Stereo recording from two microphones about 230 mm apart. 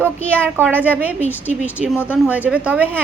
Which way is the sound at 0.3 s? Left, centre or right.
Centre.